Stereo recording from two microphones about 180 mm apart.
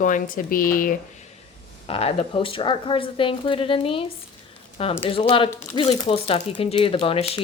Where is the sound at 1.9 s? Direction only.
35° left (ahead or behind).